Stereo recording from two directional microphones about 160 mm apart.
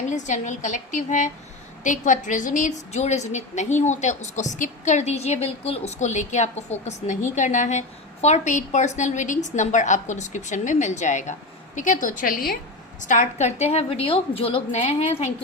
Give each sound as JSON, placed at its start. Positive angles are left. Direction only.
{"t": 0.1, "sound": "a woman's voice", "side_deg": 50}
{"t": 13.0, "sound": "a woman's voice", "side_deg": 50}